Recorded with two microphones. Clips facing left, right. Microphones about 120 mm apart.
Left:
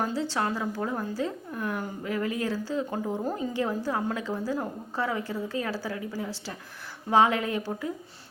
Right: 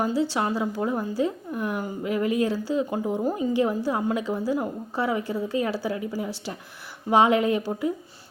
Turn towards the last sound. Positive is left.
turn(degrees=-15)  # may be behind; listen again after turning